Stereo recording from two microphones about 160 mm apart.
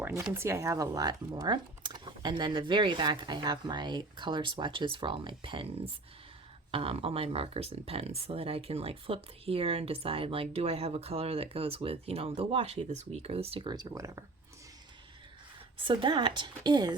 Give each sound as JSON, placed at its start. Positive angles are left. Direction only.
{"t": 0.0, "sound": "speech", "side_deg": -15}
{"t": 15.8, "sound": "speech", "side_deg": -30}